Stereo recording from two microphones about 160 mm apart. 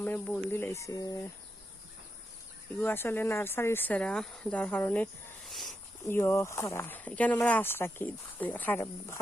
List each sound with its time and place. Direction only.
0.0 s speech: 10° left (ahead or behind)
2.8 s speech: 15° left (ahead or behind)
5.5 s a sound: centre (ahead or behind)
6.1 s speech: 15° left (ahead or behind)